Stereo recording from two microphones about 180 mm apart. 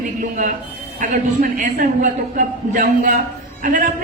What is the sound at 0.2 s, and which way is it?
Speech, 45° right (ahead or behind).